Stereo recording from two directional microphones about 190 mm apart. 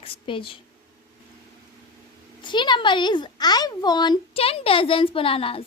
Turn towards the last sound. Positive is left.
turn(degrees=30)  # may be behind; listen again after turning